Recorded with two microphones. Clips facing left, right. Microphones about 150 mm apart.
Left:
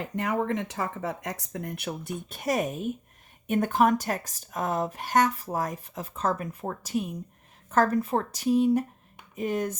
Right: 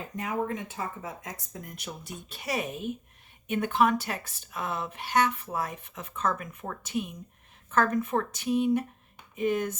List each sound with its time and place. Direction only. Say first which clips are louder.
0.0 s speech: left 3 dB; 90° left; by 9.7 s 35° left (ahead or behind)